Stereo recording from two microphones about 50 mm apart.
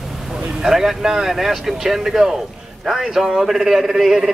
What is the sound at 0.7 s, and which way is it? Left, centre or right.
Speech, centre.